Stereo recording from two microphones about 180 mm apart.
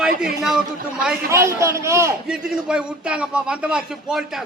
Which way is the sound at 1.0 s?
15° right (ahead or behind).